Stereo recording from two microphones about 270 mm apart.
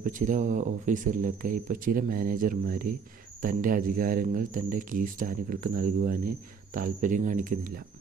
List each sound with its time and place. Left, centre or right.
0.0 s speech: right